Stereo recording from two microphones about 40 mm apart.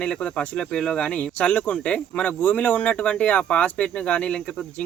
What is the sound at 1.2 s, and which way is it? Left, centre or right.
Speech, left.